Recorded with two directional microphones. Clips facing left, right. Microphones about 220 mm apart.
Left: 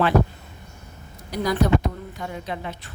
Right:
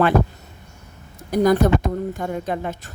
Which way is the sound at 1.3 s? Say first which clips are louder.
Right 5 dB; 50° right (ahead or behind).